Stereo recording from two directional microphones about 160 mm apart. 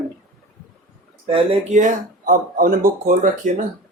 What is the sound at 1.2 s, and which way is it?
Speech, 35° right (ahead or behind).